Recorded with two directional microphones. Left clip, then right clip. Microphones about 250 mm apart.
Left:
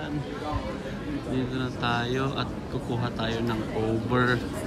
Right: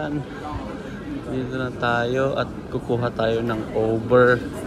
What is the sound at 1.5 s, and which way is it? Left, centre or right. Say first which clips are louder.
A man's voice: right 8 dB; centre.